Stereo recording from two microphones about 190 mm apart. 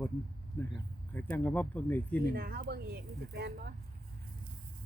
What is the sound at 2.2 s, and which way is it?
Speech, 50° right (ahead or behind).